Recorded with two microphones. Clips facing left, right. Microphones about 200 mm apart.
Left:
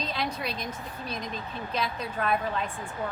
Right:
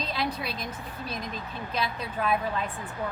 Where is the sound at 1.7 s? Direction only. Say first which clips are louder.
Even; centre (ahead or behind).